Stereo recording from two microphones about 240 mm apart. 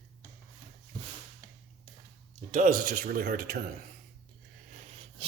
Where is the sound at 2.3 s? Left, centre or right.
Right.